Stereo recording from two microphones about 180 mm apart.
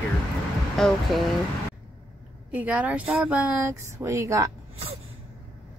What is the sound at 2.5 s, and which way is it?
Speech, 10° right (ahead or behind).